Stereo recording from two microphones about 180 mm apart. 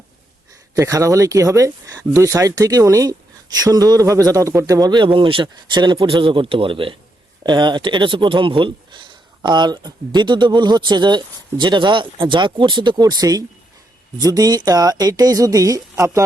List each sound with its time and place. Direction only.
0.8 s speech: 20° right (ahead or behind)